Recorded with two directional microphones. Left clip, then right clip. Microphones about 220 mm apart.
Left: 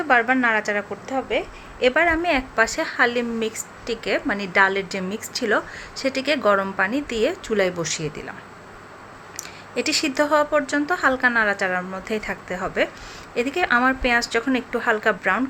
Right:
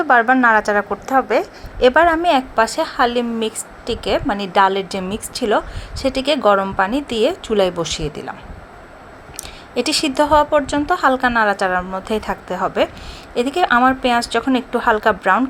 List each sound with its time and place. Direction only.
0.1 s a woman's voice: 15° right (ahead or behind)
9.7 s a woman's voice: 10° right (ahead or behind)